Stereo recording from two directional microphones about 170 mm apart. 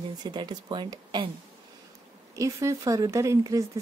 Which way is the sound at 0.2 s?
25° right (ahead or behind).